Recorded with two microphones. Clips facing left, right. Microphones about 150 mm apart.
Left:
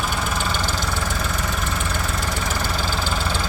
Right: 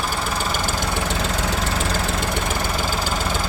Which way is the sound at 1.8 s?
90° right.